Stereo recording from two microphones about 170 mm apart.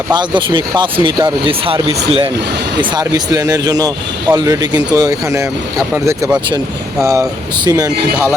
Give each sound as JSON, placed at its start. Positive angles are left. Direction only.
{"t": 0.1, "sound": "speech", "side_deg": -25}
{"t": 2.9, "sound": "speech", "side_deg": -20}